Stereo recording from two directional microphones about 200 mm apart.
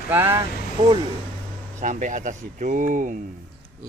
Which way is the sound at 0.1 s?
10° right (ahead or behind).